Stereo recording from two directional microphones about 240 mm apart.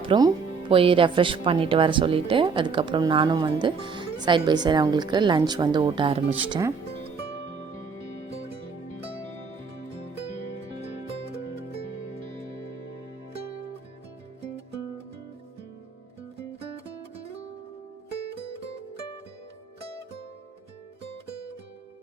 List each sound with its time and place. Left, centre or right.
0.1 s speech: centre